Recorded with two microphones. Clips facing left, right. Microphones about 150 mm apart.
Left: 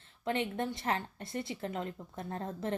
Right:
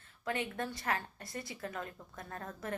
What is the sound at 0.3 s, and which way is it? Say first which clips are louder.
A woman's voice: left 4 dB; 25° left (ahead or behind).